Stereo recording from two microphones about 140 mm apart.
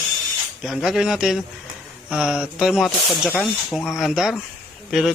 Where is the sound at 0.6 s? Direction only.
Centre (ahead or behind).